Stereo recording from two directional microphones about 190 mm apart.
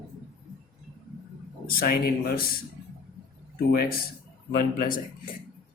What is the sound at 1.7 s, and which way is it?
Speech, 50° left (ahead or behind).